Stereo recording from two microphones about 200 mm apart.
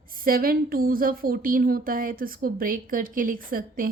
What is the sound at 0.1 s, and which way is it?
A woman's voice, 45° right (ahead or behind).